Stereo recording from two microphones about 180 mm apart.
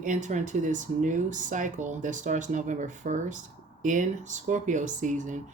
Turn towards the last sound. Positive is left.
turn(degrees=-45)  # may be behind; listen again after turning